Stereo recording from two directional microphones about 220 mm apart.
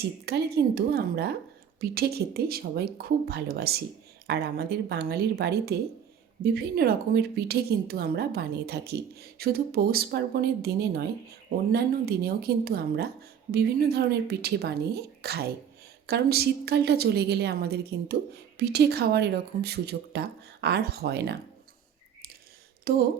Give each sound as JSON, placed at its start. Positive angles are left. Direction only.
{"t": 0.0, "sound": "a woman's voice", "side_deg": -45}
{"t": 22.8, "sound": "speech", "side_deg": -45}